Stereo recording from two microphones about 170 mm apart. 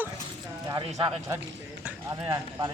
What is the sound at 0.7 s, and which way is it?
Speech, 20° right (ahead or behind).